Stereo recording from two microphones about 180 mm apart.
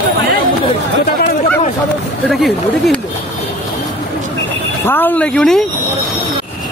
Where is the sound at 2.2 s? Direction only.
5° left (ahead or behind).